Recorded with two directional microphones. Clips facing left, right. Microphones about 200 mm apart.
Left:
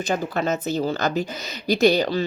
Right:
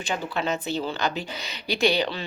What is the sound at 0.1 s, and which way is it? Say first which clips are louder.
Speech: left 3 dB; 40° left (ahead or behind).